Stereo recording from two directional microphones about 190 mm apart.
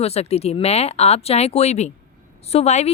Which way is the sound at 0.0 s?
35° left (ahead or behind).